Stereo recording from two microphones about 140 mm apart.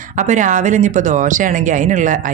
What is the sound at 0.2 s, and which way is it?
Speech, 60° right (ahead or behind).